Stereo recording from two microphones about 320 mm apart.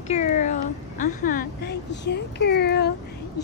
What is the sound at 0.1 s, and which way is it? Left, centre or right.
Speech, left.